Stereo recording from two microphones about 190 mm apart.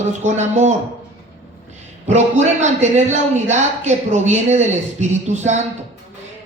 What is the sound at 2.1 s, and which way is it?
Speech, 35° right (ahead or behind).